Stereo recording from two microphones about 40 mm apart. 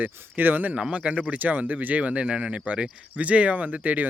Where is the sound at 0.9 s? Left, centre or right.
Right.